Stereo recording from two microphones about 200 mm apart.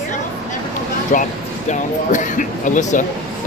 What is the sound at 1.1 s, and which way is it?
Speech, 40° left (ahead or behind).